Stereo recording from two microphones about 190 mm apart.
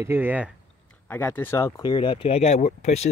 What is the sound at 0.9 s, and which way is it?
Speech, 10° left (ahead or behind).